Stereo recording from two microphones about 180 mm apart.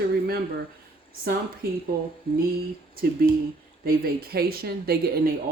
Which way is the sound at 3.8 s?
60° right (ahead or behind).